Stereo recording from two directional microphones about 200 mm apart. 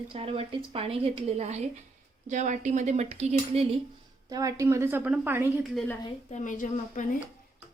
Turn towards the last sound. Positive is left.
turn(degrees=40)  # may be behind; listen again after turning